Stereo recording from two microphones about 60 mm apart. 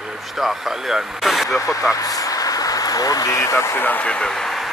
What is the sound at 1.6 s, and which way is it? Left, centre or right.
Speech, left.